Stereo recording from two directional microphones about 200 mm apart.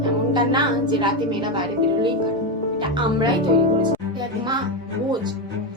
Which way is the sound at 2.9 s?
25° right (ahead or behind).